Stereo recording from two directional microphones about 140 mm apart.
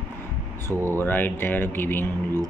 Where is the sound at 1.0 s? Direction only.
15° left (ahead or behind).